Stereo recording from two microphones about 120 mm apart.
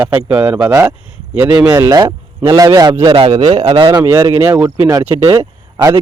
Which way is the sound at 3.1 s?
50° right (ahead or behind).